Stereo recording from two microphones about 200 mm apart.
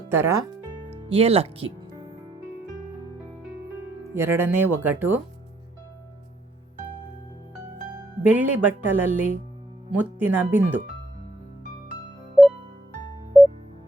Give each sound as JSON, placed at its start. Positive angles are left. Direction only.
{"t": 0.1, "sound": "speech", "side_deg": -15}
{"t": 0.9, "sound": "music", "side_deg": -30}
{"t": 4.1, "sound": "speech", "side_deg": -10}
{"t": 8.2, "sound": "speech", "side_deg": -10}
{"t": 12.4, "sound": "music", "side_deg": 0}